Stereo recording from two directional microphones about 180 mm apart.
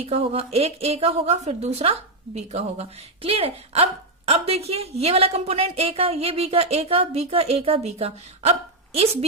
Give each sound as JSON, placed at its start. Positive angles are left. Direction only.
{"t": 0.0, "sound": "a woman's voice", "side_deg": -35}